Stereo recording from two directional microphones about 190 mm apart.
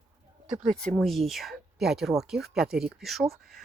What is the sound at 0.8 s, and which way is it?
Speech, 5° left (ahead or behind).